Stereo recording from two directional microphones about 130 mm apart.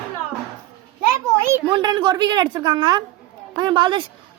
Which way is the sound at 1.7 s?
35° right (ahead or behind).